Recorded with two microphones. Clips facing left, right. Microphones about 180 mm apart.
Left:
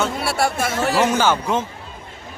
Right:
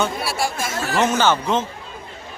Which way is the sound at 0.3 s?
60° left (ahead or behind).